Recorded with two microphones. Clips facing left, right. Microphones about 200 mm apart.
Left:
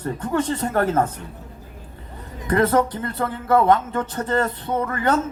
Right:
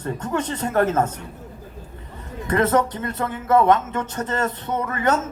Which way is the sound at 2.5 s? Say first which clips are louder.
Left 1 dB; 30° left (ahead or behind).